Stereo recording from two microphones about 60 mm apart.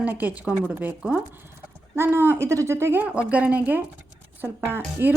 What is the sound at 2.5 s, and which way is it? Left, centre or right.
Speech, right.